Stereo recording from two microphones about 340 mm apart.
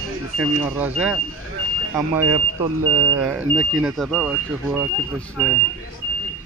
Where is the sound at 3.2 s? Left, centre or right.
Centre.